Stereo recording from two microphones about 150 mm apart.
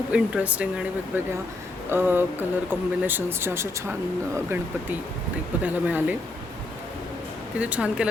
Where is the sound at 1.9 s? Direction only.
15° right (ahead or behind).